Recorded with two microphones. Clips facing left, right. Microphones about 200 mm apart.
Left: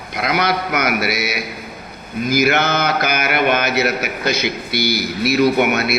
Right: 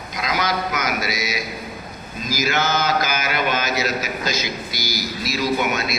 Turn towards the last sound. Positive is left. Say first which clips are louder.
# left 6 dB
turn(degrees=65)  # may be behind; listen again after turning